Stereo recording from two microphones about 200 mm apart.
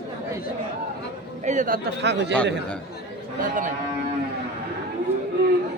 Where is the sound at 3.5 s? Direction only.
40° right (ahead or behind).